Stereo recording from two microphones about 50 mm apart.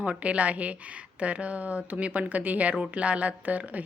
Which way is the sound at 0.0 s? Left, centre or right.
Right.